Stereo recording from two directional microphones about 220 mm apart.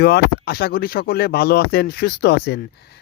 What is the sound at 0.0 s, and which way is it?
Speech, 45° left (ahead or behind).